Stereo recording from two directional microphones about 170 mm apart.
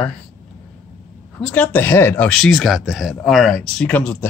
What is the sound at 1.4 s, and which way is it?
Speech, 10° left (ahead or behind).